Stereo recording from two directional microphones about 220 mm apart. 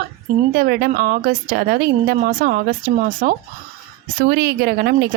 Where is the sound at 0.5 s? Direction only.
45° right (ahead or behind).